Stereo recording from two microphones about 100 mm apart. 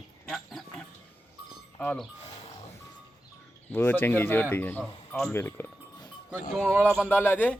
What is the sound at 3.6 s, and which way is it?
Speech, 20° left (ahead or behind).